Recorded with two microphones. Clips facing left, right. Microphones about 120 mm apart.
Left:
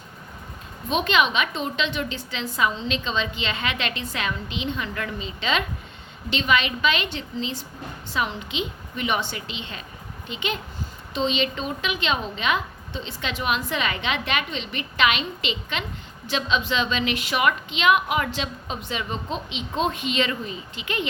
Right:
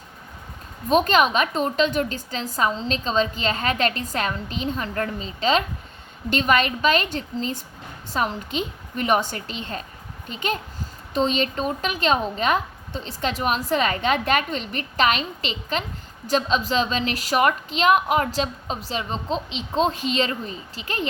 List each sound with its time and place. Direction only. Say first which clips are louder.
0.9 s a woman's voice: right 4 dB; 40° right (ahead or behind)